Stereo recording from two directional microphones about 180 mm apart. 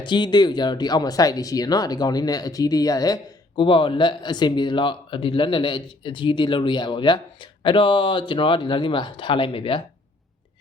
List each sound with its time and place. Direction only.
0.0 s speech: 25° left (ahead or behind)